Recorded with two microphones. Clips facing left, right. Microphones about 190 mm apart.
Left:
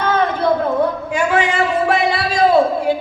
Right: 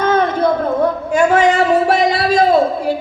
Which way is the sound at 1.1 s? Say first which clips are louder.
Right 7 dB; 45° right (ahead or behind).